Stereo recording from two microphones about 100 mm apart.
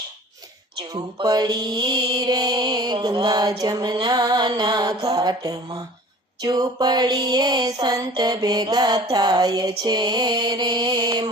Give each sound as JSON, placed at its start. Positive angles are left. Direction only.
{"t": 0.9, "sound": "mantra", "side_deg": -40}
{"t": 3.6, "sound": "music", "side_deg": -40}
{"t": 3.9, "sound": "mantra", "side_deg": -45}
{"t": 6.4, "sound": "a sound", "side_deg": -40}